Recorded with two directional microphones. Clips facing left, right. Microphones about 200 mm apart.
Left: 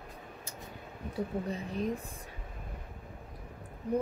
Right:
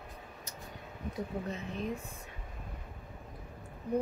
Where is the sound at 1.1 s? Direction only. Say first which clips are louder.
Left 3 dB; 35° left (ahead or behind).